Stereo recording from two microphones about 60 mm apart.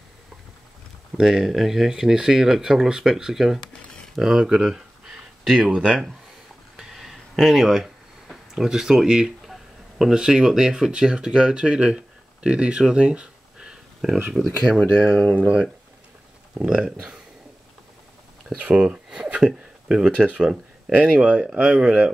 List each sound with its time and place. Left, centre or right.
1.1 s speech: centre
6.8 s a sound: centre
14.3 s speech: centre
15.0 s speech: centre
16.6 s speech: centre
18.6 s speech: centre